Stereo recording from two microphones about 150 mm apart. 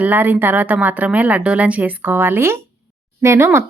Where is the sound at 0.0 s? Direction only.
10° right (ahead or behind).